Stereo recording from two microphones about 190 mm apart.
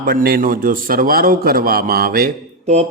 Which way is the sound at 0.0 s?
50° right (ahead or behind).